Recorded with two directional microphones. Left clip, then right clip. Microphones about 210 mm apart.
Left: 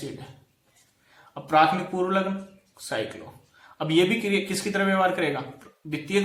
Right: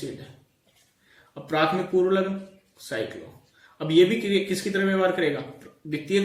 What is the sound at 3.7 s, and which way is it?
A man's voice, 25° left (ahead or behind).